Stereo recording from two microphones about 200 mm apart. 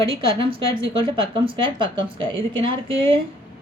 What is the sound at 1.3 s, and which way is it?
A woman's voice, 25° right (ahead or behind).